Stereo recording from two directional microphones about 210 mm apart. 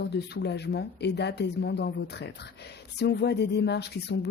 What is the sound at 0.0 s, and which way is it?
Speech, 50° left (ahead or behind).